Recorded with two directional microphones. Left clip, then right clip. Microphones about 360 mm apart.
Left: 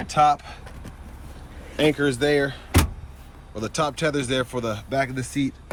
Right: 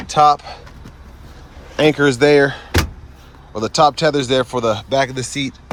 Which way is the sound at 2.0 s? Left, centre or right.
Centre.